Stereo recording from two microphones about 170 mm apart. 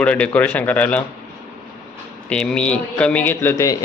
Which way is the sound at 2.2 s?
5° left (ahead or behind).